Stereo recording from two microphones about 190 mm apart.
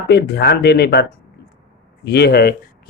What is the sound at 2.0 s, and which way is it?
Speech, 55° left (ahead or behind).